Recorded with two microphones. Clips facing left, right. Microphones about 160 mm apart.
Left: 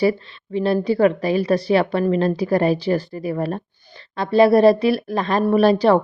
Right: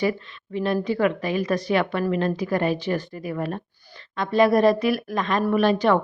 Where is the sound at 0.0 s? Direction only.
35° left (ahead or behind).